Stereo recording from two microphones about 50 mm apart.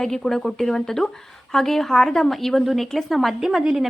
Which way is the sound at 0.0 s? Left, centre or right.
Centre.